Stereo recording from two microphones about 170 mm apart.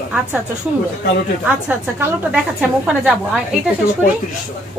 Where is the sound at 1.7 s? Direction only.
10° right (ahead or behind).